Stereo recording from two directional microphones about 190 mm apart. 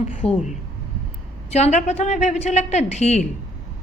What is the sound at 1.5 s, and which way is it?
A woman's voice, 35° left (ahead or behind).